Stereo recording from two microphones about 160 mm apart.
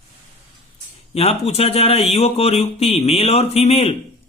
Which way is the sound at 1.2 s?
40° left (ahead or behind).